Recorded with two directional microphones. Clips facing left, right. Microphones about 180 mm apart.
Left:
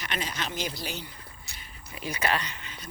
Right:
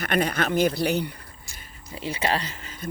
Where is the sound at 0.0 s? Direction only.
55° right (ahead or behind).